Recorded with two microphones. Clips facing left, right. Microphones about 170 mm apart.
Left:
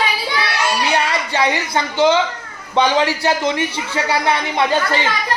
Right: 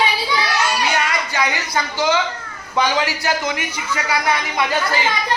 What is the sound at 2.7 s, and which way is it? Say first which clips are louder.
A man's voice: left 4 dB; 30° left (ahead or behind).